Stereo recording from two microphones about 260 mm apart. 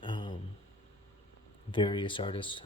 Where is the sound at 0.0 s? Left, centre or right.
Centre.